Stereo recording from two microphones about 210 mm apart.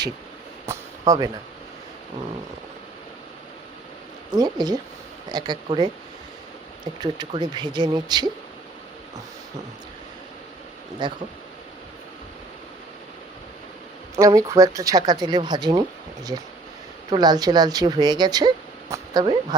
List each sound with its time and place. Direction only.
0.6 s a sound: 15° right (ahead or behind)
4.4 s speech: 20° right (ahead or behind)
7.0 s speech: 20° right (ahead or behind)
11.0 s speech: 20° right (ahead or behind)
14.2 s speech: 15° right (ahead or behind)
17.1 s speech: 20° right (ahead or behind)